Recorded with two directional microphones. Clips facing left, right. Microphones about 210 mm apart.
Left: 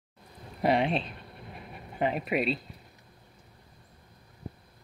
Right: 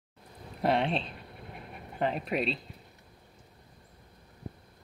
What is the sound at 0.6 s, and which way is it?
Speech, centre (ahead or behind).